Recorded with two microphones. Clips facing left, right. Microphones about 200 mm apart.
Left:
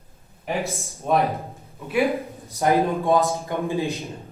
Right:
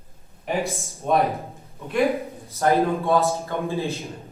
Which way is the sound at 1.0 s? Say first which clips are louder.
Even; centre (ahead or behind).